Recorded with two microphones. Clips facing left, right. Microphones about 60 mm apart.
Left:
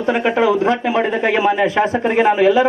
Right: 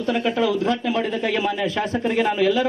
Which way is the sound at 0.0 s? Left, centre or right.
Left.